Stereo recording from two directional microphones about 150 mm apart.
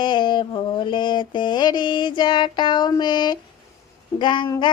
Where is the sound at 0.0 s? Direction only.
30° left (ahead or behind).